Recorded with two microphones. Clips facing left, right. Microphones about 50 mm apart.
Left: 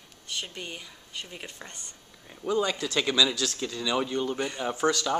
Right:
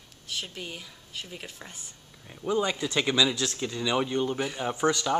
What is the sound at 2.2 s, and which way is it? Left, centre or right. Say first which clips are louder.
A woman's voice: even; centre.